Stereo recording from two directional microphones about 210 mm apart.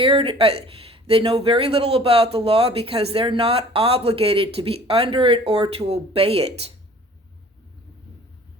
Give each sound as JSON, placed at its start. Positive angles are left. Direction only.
{"t": 0.0, "sound": "speech", "side_deg": -25}